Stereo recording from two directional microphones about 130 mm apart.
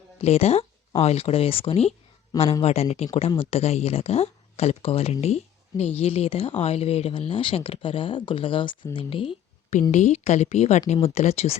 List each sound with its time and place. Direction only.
0.2 s speech: 50° left (ahead or behind)
9.9 s speech: 65° left (ahead or behind)